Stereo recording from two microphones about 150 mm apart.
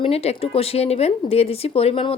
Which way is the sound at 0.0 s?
40° left (ahead or behind).